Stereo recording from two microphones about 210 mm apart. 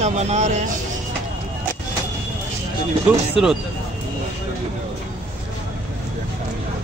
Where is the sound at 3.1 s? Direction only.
5° right (ahead or behind).